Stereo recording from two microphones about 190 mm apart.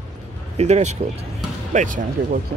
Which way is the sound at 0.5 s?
35° right (ahead or behind).